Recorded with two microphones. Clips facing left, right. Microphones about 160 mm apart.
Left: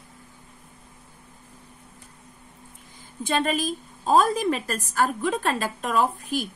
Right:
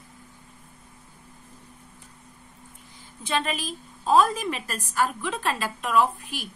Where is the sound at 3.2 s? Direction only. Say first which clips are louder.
Left 4 dB; 45° left (ahead or behind).